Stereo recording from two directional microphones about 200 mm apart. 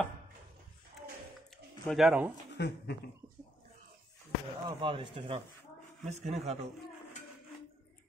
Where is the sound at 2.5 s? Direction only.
55° left (ahead or behind).